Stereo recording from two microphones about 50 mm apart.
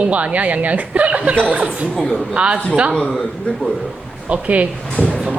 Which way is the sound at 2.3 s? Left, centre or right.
Right.